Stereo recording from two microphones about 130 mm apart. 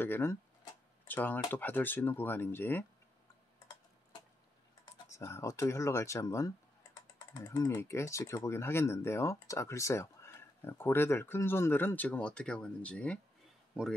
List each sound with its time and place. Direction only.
0.0 s speech: 15° left (ahead or behind)
5.0 s speech: 20° left (ahead or behind)